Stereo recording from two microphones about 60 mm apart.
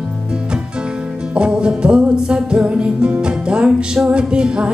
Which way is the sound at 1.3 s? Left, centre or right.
Centre.